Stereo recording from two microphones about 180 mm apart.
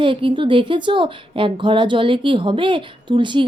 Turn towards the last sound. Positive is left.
turn(degrees=-25)  # may be behind; listen again after turning